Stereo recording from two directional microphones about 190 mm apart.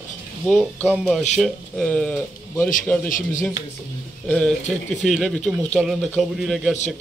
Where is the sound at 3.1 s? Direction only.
45° left (ahead or behind).